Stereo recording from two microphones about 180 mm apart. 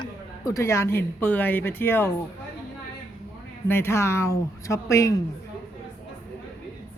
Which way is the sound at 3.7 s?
15° left (ahead or behind).